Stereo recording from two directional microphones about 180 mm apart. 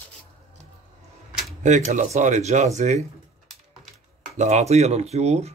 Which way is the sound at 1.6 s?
40° right (ahead or behind).